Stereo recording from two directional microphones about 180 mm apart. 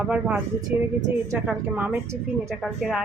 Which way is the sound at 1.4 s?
5° right (ahead or behind).